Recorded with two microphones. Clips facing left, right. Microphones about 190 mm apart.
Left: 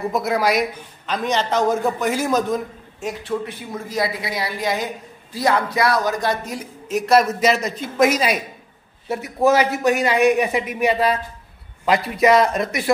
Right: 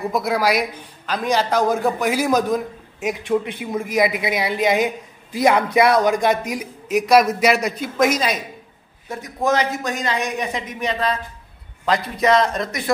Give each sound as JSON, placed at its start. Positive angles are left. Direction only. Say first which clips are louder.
{"t": 0.1, "sound": "a man's voice", "louder": "even", "side_deg": 0}
{"t": 8.0, "sound": "speech", "louder": "left 2 dB", "side_deg": 5}